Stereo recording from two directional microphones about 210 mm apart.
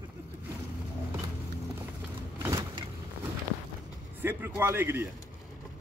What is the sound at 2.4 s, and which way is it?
Vehicle, 15° right (ahead or behind).